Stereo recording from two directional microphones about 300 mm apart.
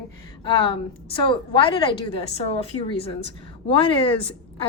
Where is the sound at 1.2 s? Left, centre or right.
Centre.